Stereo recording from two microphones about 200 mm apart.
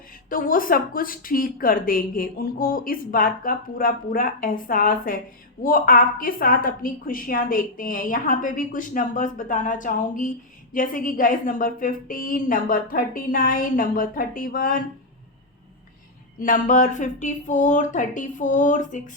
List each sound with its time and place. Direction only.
0.3 s a woman's voice: 45° left (ahead or behind)
16.4 s speech: 40° left (ahead or behind)